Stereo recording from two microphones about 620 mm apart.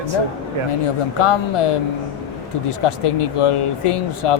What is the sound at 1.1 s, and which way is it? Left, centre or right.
Speech, left.